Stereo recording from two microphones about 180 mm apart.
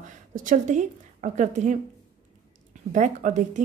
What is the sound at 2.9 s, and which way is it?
Speech, 45° right (ahead or behind).